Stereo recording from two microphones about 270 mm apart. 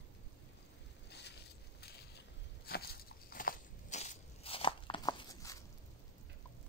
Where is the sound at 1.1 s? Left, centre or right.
Left; by 5.6 s centre.